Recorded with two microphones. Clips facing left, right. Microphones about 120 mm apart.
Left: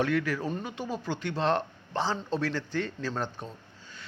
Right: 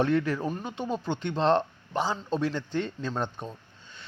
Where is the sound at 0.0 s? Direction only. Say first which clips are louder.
Right 2 dB; 25° right (ahead or behind).